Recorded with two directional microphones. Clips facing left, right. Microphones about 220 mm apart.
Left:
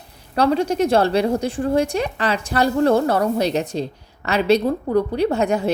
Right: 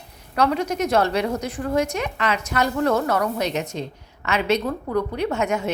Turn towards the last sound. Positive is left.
turn(degrees=35)  # may be behind; listen again after turning